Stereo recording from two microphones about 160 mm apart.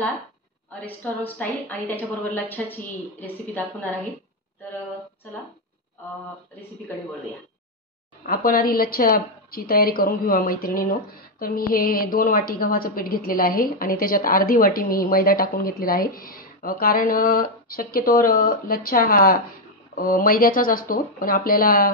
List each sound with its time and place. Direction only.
1.2 s a woman's voice: 10° left (ahead or behind)
8.3 s a woman's voice: 65° left (ahead or behind)